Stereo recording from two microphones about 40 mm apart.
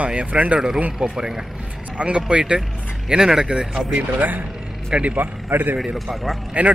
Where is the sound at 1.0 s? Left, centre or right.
Centre.